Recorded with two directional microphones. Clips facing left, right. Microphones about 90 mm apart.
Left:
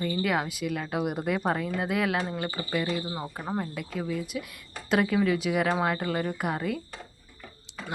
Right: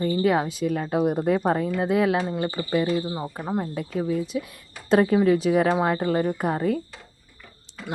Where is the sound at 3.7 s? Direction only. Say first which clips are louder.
Right 6 dB; 35° right (ahead or behind).